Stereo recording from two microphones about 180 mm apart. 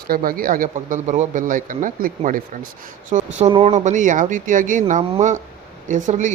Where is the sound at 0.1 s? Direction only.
50° right (ahead or behind).